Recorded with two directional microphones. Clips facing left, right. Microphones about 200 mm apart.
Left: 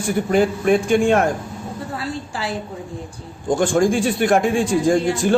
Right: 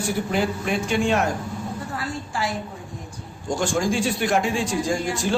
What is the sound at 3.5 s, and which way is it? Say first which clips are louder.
A man's voice: left 6 dB; 55° left (ahead or behind).